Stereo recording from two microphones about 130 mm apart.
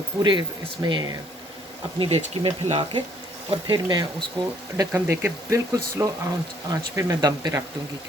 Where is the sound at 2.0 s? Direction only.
50° right (ahead or behind).